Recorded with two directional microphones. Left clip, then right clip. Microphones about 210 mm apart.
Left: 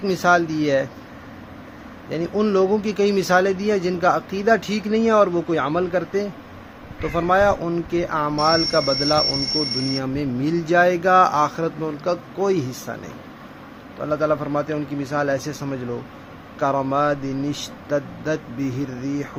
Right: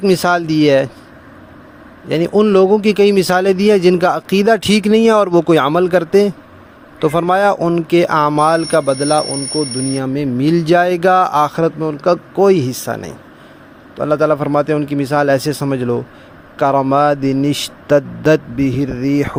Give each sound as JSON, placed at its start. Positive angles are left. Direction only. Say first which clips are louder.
{"t": 0.0, "sound": "speech", "louder": "right 4 dB", "side_deg": -45}
{"t": 2.0, "sound": "speech", "louder": "right 9 dB", "side_deg": -45}
{"t": 8.7, "sound": "speech", "louder": "right 6 dB", "side_deg": -35}
{"t": 9.2, "sound": "speech", "louder": "right 3 dB", "side_deg": 0}
{"t": 9.9, "sound": "speech", "louder": "right 6 dB", "side_deg": -35}